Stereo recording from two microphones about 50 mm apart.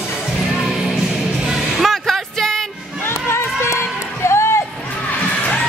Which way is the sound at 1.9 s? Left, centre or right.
Centre.